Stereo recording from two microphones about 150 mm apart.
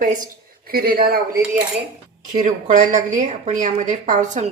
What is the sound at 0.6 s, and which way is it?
Speech, 85° right.